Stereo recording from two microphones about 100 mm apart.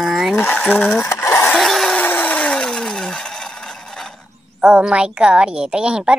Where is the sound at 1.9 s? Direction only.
15° left (ahead or behind).